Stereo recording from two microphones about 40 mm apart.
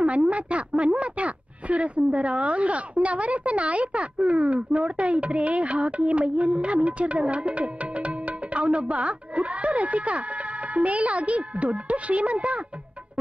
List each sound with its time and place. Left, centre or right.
0.0 s speech: right